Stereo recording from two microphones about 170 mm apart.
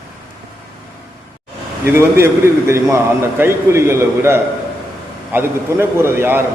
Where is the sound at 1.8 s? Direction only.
15° right (ahead or behind).